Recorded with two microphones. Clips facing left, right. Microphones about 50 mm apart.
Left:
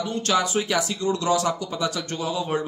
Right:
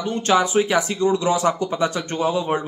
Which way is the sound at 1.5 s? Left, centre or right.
Right.